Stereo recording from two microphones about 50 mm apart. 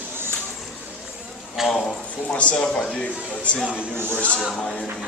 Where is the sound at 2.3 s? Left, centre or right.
Left.